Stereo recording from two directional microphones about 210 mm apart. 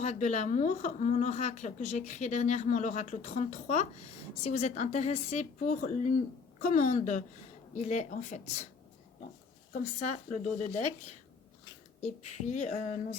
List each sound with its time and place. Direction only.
0.0 s speech: 35° left (ahead or behind)
9.7 s speech: 35° left (ahead or behind)
11.9 s speech: 30° left (ahead or behind)